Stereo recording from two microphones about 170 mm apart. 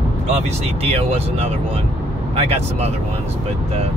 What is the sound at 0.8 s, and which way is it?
Speech, 35° right (ahead or behind).